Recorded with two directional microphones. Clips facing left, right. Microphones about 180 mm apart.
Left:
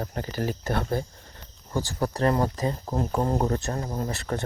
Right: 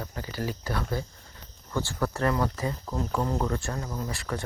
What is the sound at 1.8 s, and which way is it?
Speech, 40° left (ahead or behind).